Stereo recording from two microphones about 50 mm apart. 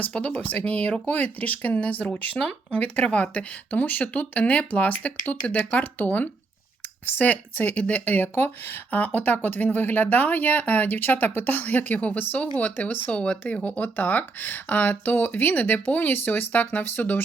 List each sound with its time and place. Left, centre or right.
0.1 s speech: left
13.1 s speech: left
13.3 s speech: left